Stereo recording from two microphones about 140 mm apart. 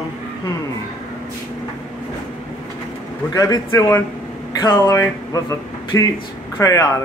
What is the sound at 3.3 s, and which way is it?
Speech, 25° left (ahead or behind).